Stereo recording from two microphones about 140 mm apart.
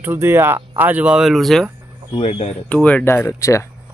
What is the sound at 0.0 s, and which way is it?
Speech, 15° right (ahead or behind).